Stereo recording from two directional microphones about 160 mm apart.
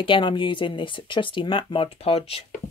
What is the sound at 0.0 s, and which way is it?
Speech, 30° left (ahead or behind).